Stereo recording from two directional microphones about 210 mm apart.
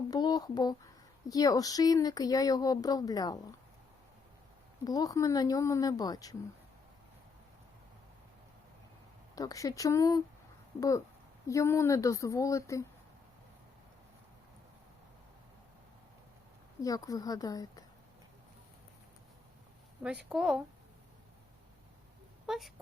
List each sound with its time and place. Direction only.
0.1 s speech: 20° left (ahead or behind)
4.9 s speech: 15° left (ahead or behind)
9.3 s speech: 15° left (ahead or behind)
16.8 s speech: 15° left (ahead or behind)
20.0 s a woman's voice: 5° right (ahead or behind)
22.4 s speech: centre (ahead or behind)